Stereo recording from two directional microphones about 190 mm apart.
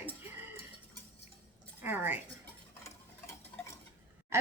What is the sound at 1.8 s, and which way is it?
Speech, 10° right (ahead or behind).